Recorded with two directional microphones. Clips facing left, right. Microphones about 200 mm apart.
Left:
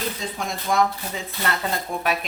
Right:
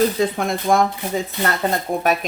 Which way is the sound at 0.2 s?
55° right (ahead or behind).